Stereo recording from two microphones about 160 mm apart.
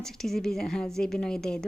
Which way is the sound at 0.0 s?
Centre (ahead or behind).